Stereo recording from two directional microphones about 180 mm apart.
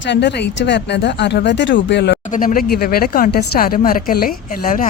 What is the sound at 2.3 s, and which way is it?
Speech, 50° left (ahead or behind).